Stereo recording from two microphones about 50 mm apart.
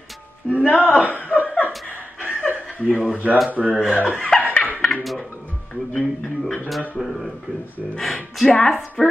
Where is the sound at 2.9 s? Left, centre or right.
Centre.